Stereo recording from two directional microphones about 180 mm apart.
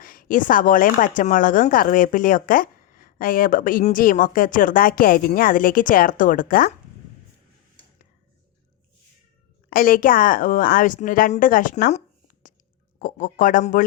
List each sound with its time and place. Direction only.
0.0 s speech: 50° left (ahead or behind)
9.6 s speech: 50° left (ahead or behind)